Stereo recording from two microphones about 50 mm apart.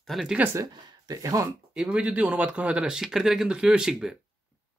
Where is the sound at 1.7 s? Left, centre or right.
Right.